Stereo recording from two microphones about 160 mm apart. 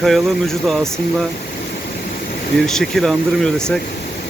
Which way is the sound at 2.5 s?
5° left (ahead or behind).